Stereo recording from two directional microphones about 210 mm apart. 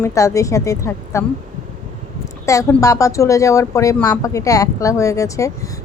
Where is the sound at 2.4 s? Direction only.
15° left (ahead or behind).